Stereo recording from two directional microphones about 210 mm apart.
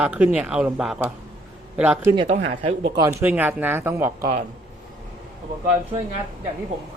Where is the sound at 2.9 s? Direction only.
15° right (ahead or behind).